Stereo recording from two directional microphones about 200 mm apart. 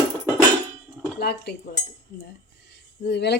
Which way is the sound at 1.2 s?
50° left (ahead or behind).